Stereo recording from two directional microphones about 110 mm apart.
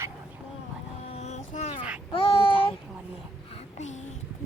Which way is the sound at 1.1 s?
90° left.